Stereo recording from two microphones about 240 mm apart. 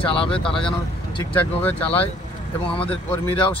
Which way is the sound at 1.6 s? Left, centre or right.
Centre.